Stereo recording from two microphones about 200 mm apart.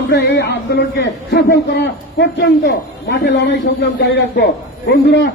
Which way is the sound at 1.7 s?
55° left (ahead or behind).